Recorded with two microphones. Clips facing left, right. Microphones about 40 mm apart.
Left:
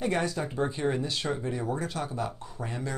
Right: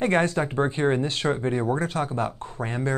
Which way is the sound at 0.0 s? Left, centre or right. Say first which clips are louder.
Right 7 dB; right.